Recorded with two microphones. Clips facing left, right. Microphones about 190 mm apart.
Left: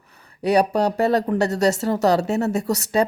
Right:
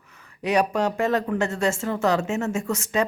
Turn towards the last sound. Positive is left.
turn(degrees=35)  # may be behind; listen again after turning